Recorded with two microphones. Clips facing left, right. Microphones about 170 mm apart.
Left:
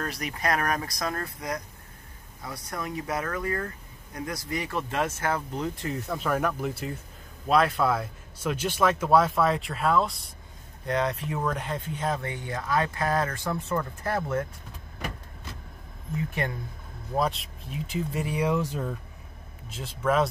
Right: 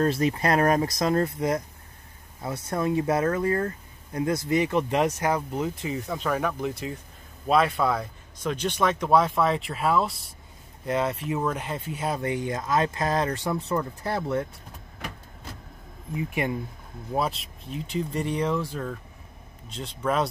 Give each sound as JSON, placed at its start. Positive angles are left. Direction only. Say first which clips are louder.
{"t": 0.0, "sound": "speech", "louder": "right 8 dB", "side_deg": -30}
{"t": 16.2, "sound": "speech", "louder": "right 3 dB", "side_deg": -10}
{"t": 17.1, "sound": "speech", "louder": "even", "side_deg": 0}
{"t": 19.7, "sound": "speech", "louder": "left 1 dB", "side_deg": 0}